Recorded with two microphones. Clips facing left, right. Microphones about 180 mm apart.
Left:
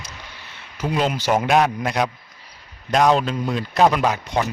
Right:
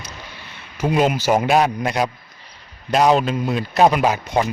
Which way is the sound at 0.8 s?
10° right (ahead or behind).